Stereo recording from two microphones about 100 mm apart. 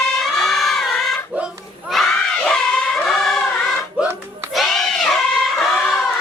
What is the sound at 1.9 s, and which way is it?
Crowd, 5° left (ahead or behind).